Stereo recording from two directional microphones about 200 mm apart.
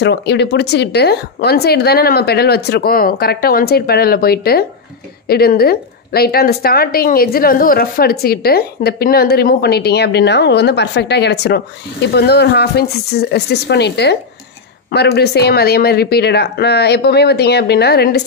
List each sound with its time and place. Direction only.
0.0 s a woman's voice: 60° left (ahead or behind)